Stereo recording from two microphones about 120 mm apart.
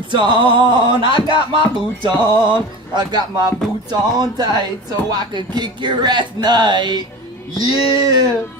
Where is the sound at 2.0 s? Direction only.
40° right (ahead or behind).